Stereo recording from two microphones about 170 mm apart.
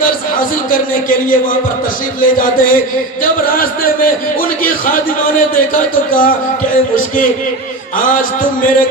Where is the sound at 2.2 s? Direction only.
55° left (ahead or behind).